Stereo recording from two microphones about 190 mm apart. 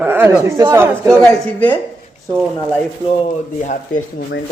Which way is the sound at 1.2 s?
10° left (ahead or behind).